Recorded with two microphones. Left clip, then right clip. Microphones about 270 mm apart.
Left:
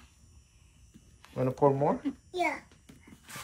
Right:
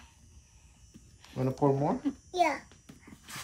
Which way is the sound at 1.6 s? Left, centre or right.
Centre.